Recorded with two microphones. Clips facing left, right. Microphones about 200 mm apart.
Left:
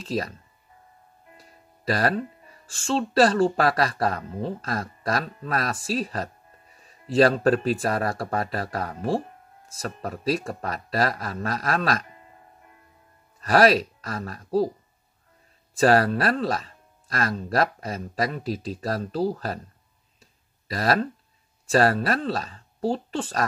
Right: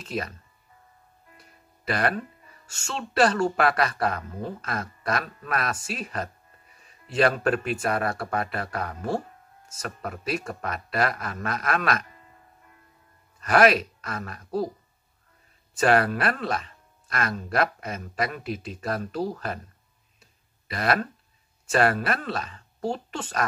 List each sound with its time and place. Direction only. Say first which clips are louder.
0.0 s speech: left 3 dB; 35° left (ahead or behind)
1.3 s speech: left 3 dB; 35° left (ahead or behind)
13.4 s speech: left 1 dB; 35° left (ahead or behind)
15.8 s speech: left 2 dB; 35° left (ahead or behind)
20.2 s a sound: left 3 dB; 35° left (ahead or behind)
21.6 s speech: left 2 dB; 35° left (ahead or behind)